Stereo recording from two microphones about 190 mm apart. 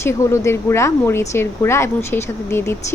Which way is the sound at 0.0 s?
15° left (ahead or behind).